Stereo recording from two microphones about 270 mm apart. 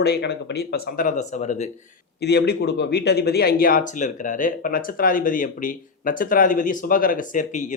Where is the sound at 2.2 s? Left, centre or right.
Left.